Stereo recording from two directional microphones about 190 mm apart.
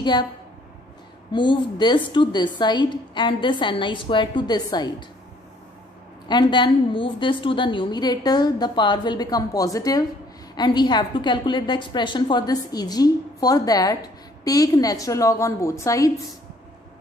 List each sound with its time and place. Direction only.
0.0 s a woman's voice: 25° left (ahead or behind)
1.3 s a woman's voice: 25° left (ahead or behind)
6.2 s a woman's voice: 25° left (ahead or behind)